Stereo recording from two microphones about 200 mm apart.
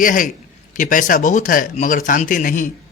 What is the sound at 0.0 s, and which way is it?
Speech, 40° left (ahead or behind).